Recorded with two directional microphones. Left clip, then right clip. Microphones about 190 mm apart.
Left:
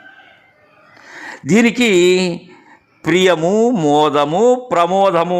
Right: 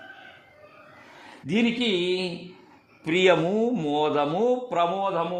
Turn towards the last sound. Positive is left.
turn(degrees=50)  # may be behind; listen again after turning